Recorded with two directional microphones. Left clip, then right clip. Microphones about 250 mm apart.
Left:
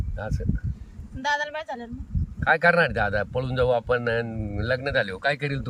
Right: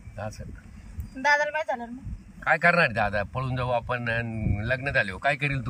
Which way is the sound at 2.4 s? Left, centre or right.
Centre.